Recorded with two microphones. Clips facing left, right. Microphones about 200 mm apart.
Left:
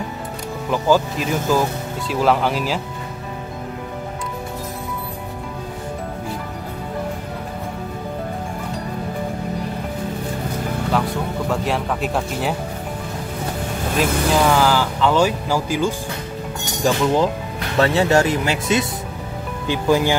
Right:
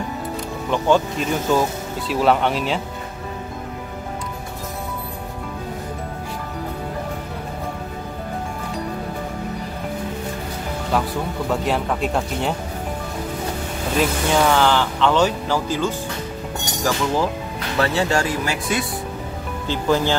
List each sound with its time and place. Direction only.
0.7 s speech: 5° left (ahead or behind)
10.9 s speech: centre (ahead or behind)
13.9 s speech: centre (ahead or behind)
17.7 s speech: 20° left (ahead or behind)